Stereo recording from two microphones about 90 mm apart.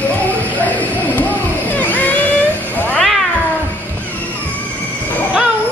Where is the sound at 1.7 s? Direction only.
15° left (ahead or behind).